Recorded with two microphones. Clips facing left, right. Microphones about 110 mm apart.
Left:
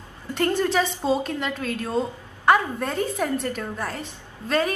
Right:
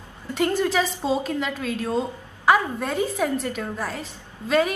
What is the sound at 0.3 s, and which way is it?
A woman's voice, 5° right (ahead or behind).